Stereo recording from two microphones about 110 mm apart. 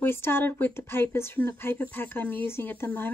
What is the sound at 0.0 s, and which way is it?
Speech, 20° left (ahead or behind).